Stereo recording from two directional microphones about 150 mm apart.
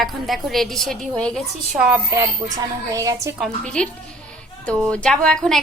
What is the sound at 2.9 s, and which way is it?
Speech, 20° right (ahead or behind).